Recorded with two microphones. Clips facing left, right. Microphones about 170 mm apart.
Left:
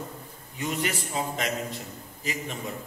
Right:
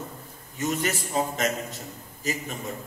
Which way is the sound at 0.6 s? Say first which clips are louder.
Right 2 dB; 45° right (ahead or behind).